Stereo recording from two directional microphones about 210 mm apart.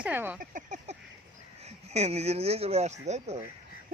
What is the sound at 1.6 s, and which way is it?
Speech, 30° right (ahead or behind).